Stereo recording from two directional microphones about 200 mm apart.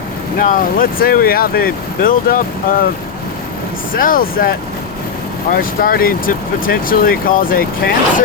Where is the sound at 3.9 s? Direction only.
45° left (ahead or behind).